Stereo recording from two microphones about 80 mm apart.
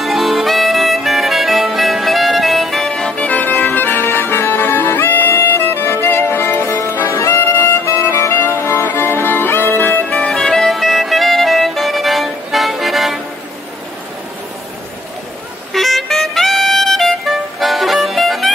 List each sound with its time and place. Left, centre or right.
0.0 s music: centre; by 7.2 s left
7.2 s music: left
7.4 s music: left
7.8 s music: left; by 13.2 s centre
15.7 s music: centre